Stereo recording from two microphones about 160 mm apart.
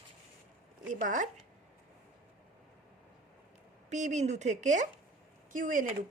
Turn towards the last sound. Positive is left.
turn(degrees=-55)  # may be behind; listen again after turning